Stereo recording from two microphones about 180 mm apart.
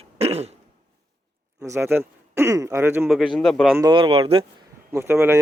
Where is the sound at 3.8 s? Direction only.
25° right (ahead or behind).